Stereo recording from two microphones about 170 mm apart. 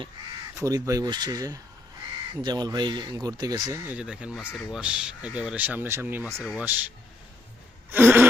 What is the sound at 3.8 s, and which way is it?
Speech, 5° right (ahead or behind).